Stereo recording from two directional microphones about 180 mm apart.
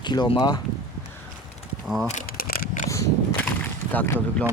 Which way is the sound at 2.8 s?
15° left (ahead or behind).